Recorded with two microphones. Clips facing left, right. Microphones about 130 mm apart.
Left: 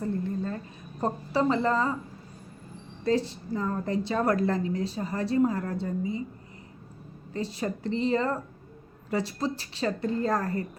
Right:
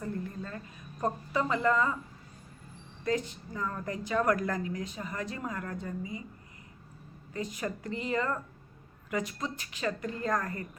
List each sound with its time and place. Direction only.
0.0 s a sound: 30° left (ahead or behind)
1.0 s a woman's voice: 30° left (ahead or behind)
3.0 s a woman's voice: 30° left (ahead or behind)
7.3 s a woman's voice: 30° left (ahead or behind)